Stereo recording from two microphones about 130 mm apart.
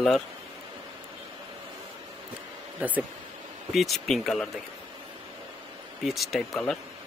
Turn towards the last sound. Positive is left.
turn(degrees=0)  # may be behind; listen again after turning